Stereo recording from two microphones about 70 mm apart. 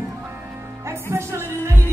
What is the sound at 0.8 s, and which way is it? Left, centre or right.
Music, right.